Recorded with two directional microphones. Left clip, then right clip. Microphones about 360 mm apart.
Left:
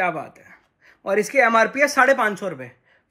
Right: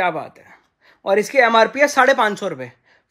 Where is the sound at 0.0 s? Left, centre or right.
Centre.